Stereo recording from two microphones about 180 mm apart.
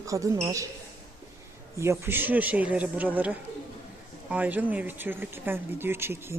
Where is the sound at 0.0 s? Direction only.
15° right (ahead or behind).